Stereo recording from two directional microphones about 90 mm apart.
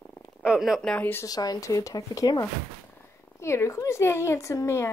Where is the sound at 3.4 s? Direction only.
30° left (ahead or behind).